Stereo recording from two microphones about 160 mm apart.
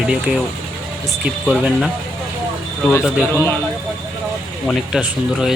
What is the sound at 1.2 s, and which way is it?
Speech, 5° right (ahead or behind).